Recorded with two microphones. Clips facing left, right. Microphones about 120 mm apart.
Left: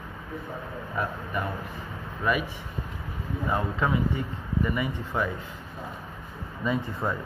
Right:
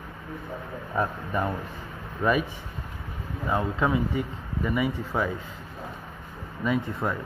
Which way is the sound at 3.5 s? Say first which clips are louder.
Right 2 dB; 15° right (ahead or behind).